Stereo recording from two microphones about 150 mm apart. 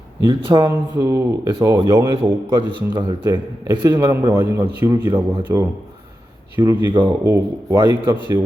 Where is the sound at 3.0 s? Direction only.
30° right (ahead or behind).